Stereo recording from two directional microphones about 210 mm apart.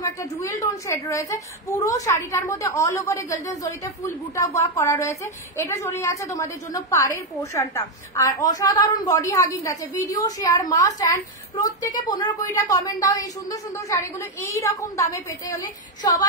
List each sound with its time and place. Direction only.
0.0 s a woman's voice: 15° left (ahead or behind)